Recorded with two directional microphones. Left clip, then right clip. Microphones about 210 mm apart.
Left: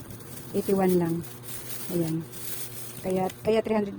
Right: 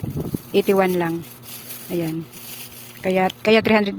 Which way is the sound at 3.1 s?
20° right (ahead or behind).